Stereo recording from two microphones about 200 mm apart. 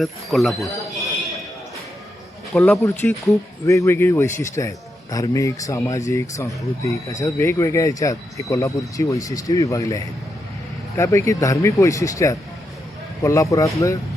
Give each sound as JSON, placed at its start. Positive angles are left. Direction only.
{"t": 0.0, "sound": "speech", "side_deg": 0}
{"t": 2.5, "sound": "speech", "side_deg": 5}